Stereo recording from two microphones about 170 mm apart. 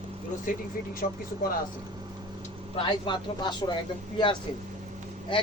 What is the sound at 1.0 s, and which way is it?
Speech, 50° left (ahead or behind).